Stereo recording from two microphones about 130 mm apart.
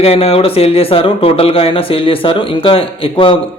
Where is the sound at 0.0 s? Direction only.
50° left (ahead or behind).